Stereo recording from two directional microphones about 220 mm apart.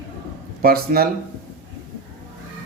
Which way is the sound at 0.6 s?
45° right (ahead or behind).